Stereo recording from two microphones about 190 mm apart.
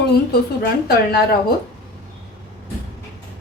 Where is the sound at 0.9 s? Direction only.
55° left (ahead or behind).